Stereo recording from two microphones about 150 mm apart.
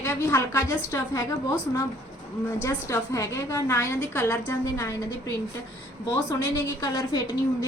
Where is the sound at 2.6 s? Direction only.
20° left (ahead or behind).